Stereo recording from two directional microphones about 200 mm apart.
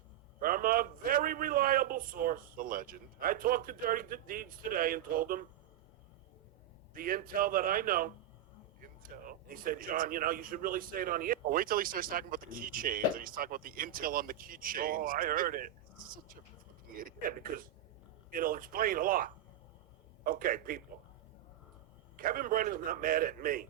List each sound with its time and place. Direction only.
0.3 s a man's voice: 45° right (ahead or behind)
6.9 s a man's voice: 45° right (ahead or behind)
16.9 s a man's voice: 45° right (ahead or behind)
22.1 s a man's voice: 45° right (ahead or behind)